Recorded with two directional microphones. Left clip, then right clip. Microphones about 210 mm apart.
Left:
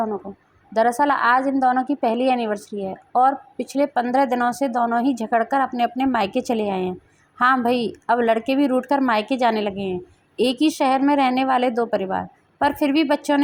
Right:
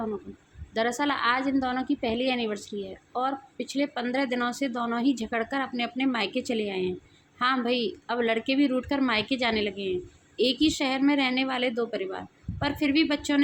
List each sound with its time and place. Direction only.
0.7 s a woman's voice: 20° left (ahead or behind)